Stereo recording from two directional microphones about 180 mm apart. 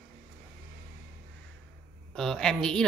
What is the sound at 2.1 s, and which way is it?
Speech, 5° left (ahead or behind).